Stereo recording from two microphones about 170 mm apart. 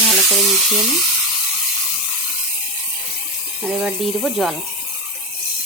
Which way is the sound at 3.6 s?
Centre (ahead or behind).